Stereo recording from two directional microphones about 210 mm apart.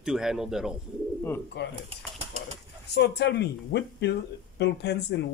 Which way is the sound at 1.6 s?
55° left (ahead or behind).